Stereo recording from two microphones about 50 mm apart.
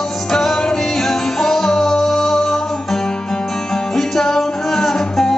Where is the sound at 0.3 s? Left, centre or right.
Centre.